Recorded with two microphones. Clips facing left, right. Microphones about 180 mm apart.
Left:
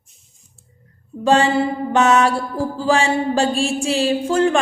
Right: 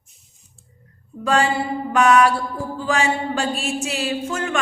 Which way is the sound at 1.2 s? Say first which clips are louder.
Left 4 dB; 25° left (ahead or behind).